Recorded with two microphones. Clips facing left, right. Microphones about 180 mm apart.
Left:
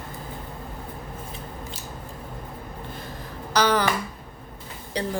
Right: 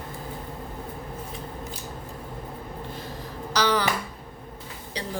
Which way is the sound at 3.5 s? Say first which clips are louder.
Left 2 dB; 50° left (ahead or behind).